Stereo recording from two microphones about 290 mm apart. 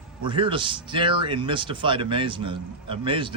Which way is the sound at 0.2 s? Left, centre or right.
Centre.